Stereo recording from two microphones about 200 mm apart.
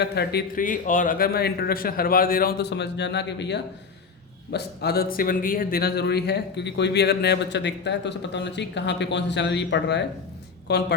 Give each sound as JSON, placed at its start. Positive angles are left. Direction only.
{"t": 0.0, "sound": "speech", "side_deg": 55}